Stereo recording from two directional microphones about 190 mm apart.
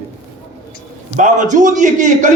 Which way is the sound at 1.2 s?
40° right (ahead or behind).